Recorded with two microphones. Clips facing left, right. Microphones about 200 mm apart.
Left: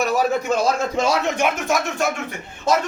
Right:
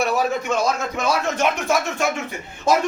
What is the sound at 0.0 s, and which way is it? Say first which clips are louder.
A man's voice: left 1 dB; 35° left (ahead or behind).